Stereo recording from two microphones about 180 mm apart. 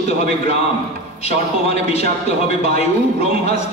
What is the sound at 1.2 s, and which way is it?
Speech, 35° left (ahead or behind).